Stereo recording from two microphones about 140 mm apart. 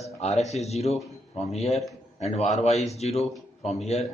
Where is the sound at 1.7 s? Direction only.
Centre (ahead or behind).